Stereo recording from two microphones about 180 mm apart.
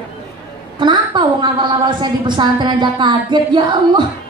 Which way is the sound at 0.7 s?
25° right (ahead or behind).